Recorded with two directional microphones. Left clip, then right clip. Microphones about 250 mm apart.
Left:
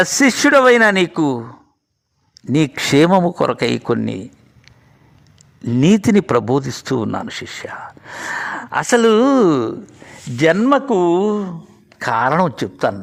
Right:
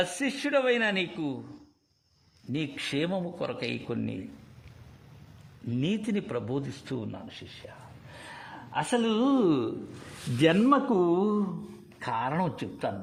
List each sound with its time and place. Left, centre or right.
0.0 s speech: left
2.5 s speech: left
5.6 s speech: left
10.4 s a man's voice: left